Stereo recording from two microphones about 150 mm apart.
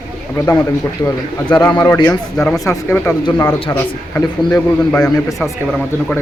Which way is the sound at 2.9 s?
15° left (ahead or behind).